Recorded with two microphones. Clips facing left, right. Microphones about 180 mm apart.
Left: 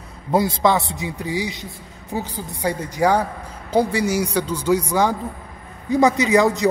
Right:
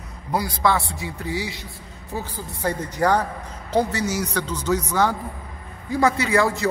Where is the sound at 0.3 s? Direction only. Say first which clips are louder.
Left 4 dB; 25° left (ahead or behind).